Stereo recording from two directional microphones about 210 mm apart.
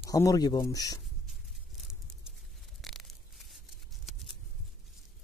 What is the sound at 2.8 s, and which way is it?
Tearing, centre (ahead or behind).